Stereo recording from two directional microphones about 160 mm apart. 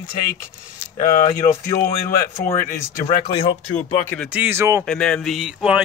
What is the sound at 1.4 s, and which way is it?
Speech, 40° left (ahead or behind).